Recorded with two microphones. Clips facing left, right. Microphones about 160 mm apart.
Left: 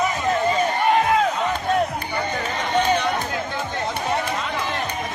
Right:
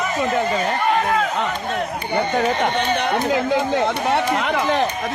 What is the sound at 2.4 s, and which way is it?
Speech, 65° right (ahead or behind).